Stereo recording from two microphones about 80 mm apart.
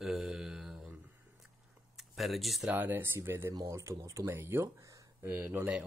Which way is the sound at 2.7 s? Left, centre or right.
Right.